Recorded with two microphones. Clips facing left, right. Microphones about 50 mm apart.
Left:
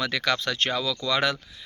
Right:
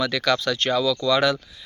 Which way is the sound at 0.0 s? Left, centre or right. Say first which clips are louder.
Right 4 dB; left.